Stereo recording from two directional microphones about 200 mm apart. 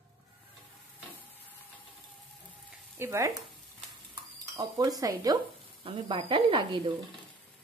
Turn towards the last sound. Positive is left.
turn(degrees=-20)  # may be behind; listen again after turning